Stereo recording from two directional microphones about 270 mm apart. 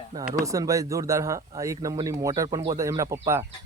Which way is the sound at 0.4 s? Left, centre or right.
Centre.